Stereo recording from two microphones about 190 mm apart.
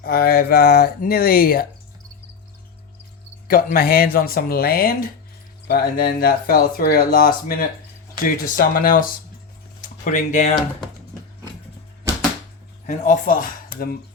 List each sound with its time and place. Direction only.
0.0 s speech: 50° left (ahead or behind)
3.4 s speech: 50° left (ahead or behind)
12.8 s speech: 40° left (ahead or behind)